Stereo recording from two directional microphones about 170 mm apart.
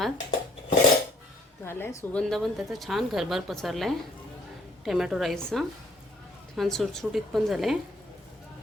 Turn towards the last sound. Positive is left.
turn(degrees=0)  # may be behind; listen again after turning